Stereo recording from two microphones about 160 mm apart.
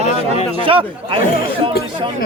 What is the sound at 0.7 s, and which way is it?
Speech, 35° right (ahead or behind).